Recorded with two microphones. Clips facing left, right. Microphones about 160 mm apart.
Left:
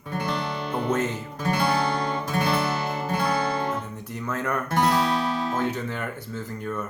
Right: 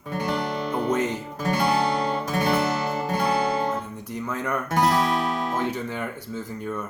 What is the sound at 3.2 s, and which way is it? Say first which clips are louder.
Guitar: right 3 dB; 25° right (ahead or behind).